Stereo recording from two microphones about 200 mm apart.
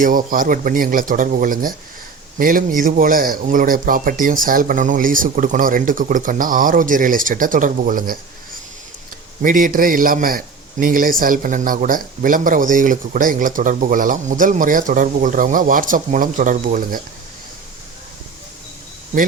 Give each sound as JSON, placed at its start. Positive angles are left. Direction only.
{"t": 0.0, "sound": "a man's voice", "side_deg": -45}
{"t": 9.4, "sound": "a man's voice", "side_deg": -45}